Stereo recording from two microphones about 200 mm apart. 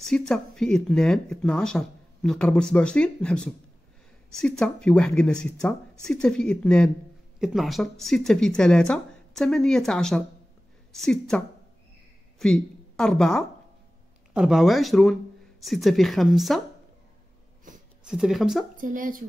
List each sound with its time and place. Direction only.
0.0 s speech: centre (ahead or behind)
18.0 s speech: 5° right (ahead or behind)
18.8 s speech: 40° right (ahead or behind)